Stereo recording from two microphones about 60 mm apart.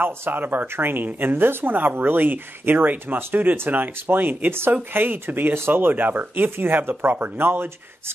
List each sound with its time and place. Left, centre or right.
0.0 s speech: right